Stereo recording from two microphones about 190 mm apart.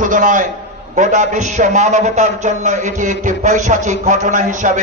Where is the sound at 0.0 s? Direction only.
45° right (ahead or behind).